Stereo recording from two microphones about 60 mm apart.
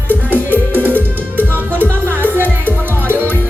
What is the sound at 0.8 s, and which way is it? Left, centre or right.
Music, right.